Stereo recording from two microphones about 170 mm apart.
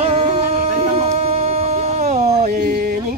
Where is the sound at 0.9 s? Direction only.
40° right (ahead or behind).